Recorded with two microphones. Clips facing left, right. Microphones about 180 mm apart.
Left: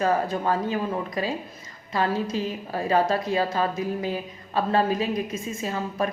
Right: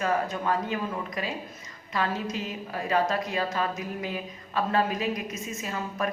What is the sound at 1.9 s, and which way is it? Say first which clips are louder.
A woman's voice: left 4 dB; 35° left (ahead or behind).